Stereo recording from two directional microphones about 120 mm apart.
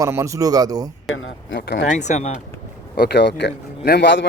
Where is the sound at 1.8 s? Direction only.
75° left (ahead or behind).